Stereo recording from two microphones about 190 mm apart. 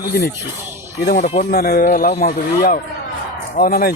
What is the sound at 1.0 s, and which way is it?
Speech, 45° left (ahead or behind).